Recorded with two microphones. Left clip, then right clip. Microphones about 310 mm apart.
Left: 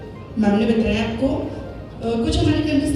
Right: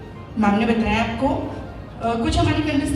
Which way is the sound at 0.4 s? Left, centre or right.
Centre.